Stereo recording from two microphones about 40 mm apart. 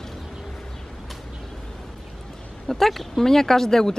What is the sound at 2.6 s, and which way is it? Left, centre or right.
Speech, centre.